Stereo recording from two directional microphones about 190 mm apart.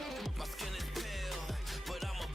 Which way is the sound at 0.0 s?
Centre (ahead or behind).